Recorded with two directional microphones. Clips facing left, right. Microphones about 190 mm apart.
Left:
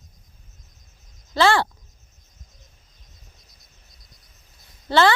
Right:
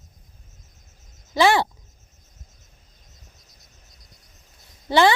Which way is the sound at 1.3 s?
15° right (ahead or behind).